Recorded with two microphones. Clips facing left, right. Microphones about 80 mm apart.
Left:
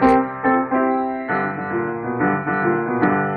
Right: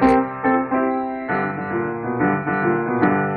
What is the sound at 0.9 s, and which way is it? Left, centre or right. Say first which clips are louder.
Music: left 2 dB; centre.